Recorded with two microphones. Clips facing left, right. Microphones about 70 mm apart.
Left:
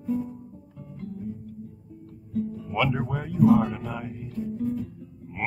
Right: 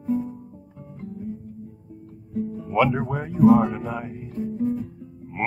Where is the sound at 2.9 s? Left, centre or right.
Centre.